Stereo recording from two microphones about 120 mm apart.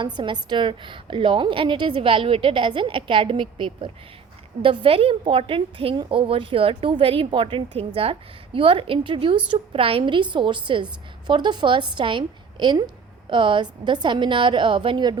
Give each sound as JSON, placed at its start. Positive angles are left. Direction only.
{"t": 0.0, "sound": "a woman's voice", "side_deg": -40}